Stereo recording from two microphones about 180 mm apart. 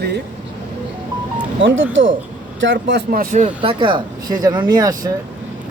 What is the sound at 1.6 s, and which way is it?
Speech, 90° right.